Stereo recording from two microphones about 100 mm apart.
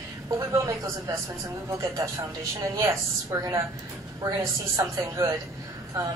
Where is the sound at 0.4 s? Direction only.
35° right (ahead or behind).